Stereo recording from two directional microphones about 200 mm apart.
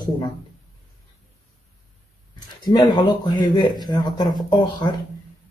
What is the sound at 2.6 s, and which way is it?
Speech, 20° left (ahead or behind).